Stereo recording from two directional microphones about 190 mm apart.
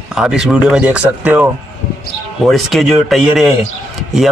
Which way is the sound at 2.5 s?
Centre (ahead or behind).